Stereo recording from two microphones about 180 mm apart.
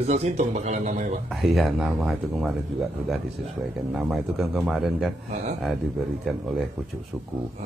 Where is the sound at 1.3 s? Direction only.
Centre (ahead or behind).